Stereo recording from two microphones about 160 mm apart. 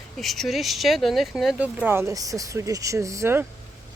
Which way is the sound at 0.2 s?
Centre (ahead or behind).